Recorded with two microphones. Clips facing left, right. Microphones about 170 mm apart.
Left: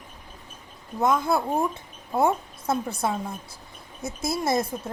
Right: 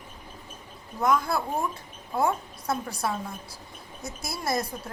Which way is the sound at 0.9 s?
25° left (ahead or behind).